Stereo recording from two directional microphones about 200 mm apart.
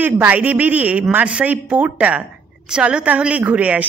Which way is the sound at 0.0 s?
5° right (ahead or behind).